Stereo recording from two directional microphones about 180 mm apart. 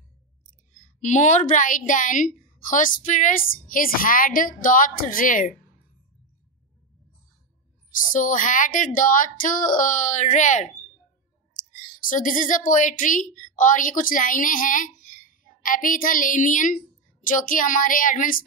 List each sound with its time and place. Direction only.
0.7 s a woman's voice: 45° left (ahead or behind)
7.9 s a woman's voice: 45° left (ahead or behind)
11.7 s a woman's voice: 45° left (ahead or behind)